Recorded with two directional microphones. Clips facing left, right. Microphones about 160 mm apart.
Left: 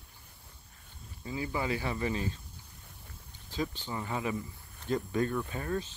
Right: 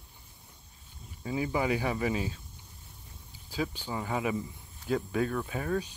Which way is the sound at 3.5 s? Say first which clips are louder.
Right 2 dB; 10° right (ahead or behind).